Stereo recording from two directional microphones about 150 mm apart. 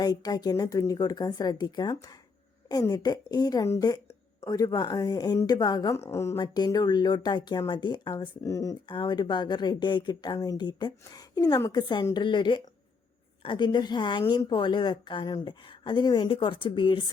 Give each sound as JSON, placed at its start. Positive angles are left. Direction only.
{"t": 0.0, "sound": "speech", "side_deg": 25}
{"t": 6.3, "sound": "a woman's voice", "side_deg": 30}